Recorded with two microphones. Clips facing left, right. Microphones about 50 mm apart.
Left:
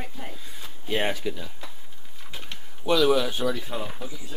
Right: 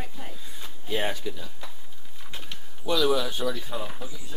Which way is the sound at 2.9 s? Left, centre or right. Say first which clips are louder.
Left 3 dB; centre.